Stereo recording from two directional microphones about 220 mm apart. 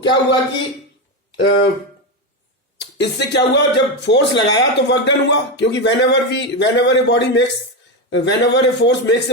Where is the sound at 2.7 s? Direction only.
50° left (ahead or behind).